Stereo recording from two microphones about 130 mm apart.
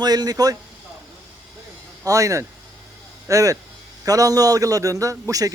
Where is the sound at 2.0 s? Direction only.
25° right (ahead or behind).